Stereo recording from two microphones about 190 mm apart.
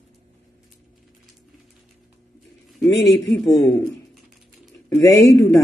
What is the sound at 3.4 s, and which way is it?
Speech, 20° left (ahead or behind).